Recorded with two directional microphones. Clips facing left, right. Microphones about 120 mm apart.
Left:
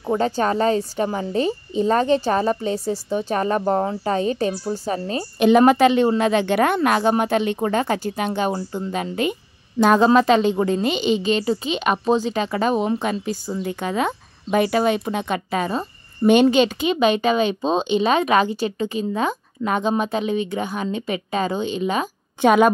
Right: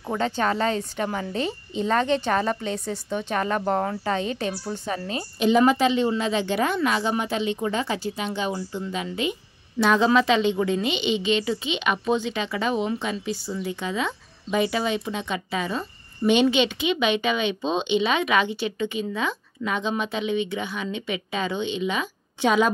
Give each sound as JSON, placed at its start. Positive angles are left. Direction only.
{"t": 0.2, "sound": "speech", "side_deg": 40}
{"t": 5.4, "sound": "a woman's voice", "side_deg": 60}